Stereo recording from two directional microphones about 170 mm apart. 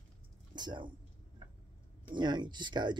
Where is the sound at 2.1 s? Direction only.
25° right (ahead or behind).